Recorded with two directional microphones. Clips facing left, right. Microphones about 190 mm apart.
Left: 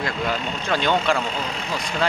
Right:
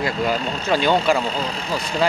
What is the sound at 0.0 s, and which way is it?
A man's voice, 5° right (ahead or behind).